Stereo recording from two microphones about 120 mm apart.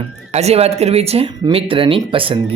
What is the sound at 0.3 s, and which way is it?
Speech, 65° right (ahead or behind).